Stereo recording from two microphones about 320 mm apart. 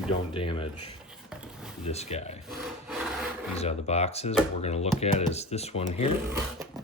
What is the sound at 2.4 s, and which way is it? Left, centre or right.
Wood, centre.